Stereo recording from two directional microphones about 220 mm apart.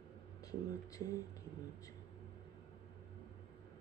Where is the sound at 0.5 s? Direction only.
15° left (ahead or behind).